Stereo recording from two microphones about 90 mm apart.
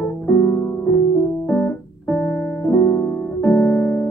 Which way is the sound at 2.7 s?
30° left (ahead or behind).